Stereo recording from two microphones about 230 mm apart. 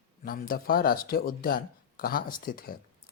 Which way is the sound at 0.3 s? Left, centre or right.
Left.